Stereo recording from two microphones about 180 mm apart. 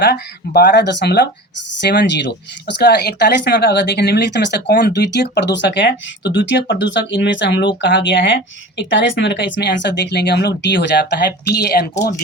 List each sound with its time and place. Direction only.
0.0 s speech: 65° left (ahead or behind)
8.8 s speech: 90° left; by 11.9 s 60° left (ahead or behind)